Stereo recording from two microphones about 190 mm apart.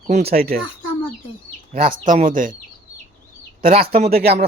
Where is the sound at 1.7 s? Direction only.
45° right (ahead or behind).